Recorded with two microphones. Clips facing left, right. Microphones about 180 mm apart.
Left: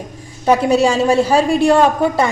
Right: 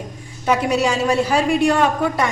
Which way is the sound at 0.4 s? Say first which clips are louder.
Left 5 dB; 30° left (ahead or behind).